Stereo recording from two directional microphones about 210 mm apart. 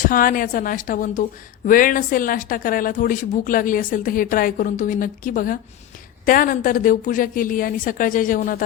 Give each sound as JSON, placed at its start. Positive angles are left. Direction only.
{"t": 0.0, "sound": "speech", "side_deg": 40}